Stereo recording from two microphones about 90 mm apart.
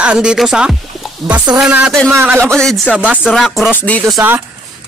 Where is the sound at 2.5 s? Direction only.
10° left (ahead or behind).